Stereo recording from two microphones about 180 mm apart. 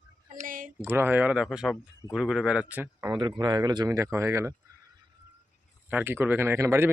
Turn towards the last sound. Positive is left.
turn(degrees=-15)  # may be behind; listen again after turning